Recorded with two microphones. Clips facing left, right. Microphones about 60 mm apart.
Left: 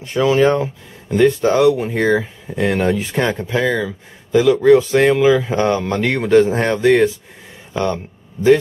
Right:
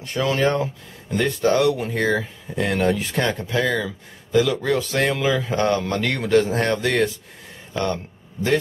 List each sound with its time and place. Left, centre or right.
0.0 s a man's voice: centre